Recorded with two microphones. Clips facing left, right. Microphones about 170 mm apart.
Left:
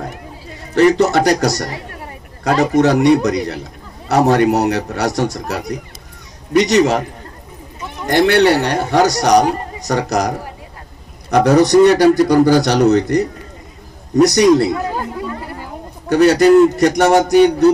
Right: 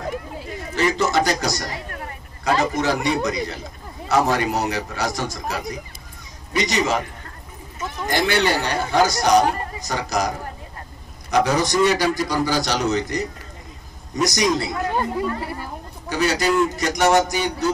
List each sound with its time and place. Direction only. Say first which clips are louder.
0.7 s a man's voice: left 8 dB; 65° left (ahead or behind)
8.1 s a man's voice: left 9 dB; 65° left (ahead or behind)
14.9 s chatter: even; centre (ahead or behind)
16.1 s a man's voice: left 11 dB; 60° left (ahead or behind)